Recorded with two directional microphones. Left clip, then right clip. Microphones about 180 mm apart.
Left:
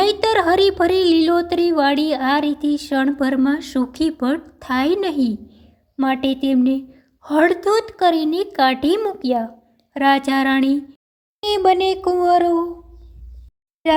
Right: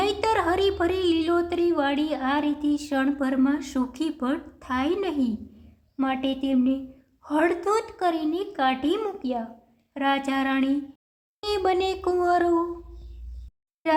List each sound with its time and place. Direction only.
0.0 s speech: 30° left (ahead or behind)
6.0 s a sound: 30° left (ahead or behind)
7.2 s speech: 30° left (ahead or behind)
9.9 s a sound: 30° left (ahead or behind)
11.3 s music: 20° left (ahead or behind)
13.8 s speech: 20° left (ahead or behind)